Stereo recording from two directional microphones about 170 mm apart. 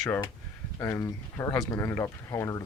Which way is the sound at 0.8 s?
15° left (ahead or behind).